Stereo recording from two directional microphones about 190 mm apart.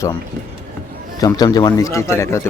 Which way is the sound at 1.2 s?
15° left (ahead or behind).